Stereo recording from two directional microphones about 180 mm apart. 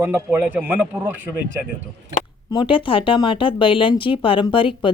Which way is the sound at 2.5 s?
25° left (ahead or behind).